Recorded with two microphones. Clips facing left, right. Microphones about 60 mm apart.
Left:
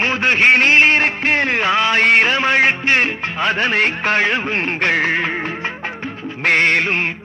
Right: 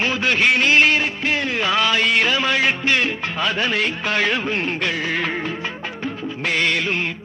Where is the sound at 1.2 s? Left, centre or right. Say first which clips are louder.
Left 4 dB; left.